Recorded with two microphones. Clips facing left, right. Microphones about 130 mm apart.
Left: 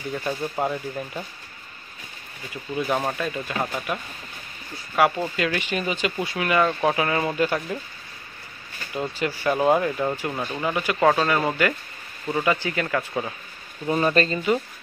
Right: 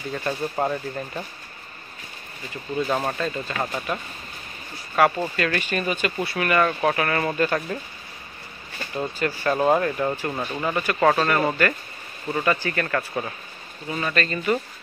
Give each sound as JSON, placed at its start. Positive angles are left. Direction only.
{"t": 0.1, "sound": "speech", "side_deg": 5}
{"t": 3.0, "sound": "speech", "side_deg": 5}
{"t": 8.9, "sound": "speech", "side_deg": 10}
{"t": 13.8, "sound": "speech", "side_deg": 35}